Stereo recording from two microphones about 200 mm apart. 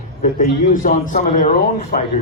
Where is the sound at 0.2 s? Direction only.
40° left (ahead or behind).